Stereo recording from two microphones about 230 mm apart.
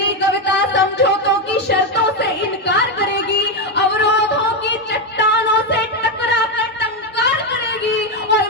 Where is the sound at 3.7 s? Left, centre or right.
Left.